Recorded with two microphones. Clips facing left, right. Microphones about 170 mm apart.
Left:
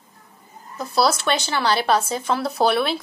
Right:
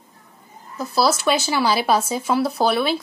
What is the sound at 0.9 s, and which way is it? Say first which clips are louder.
A woman's voice: right 1 dB; centre (ahead or behind).